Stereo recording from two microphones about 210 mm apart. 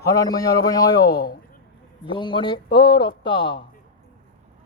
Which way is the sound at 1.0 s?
50° left (ahead or behind).